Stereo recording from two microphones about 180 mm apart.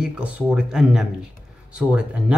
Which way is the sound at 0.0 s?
5° right (ahead or behind).